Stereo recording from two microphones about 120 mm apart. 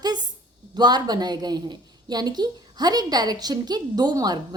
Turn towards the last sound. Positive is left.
turn(degrees=-35)  # may be behind; listen again after turning